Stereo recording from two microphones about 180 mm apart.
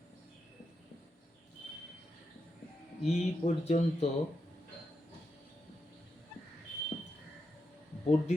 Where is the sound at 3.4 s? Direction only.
40° left (ahead or behind).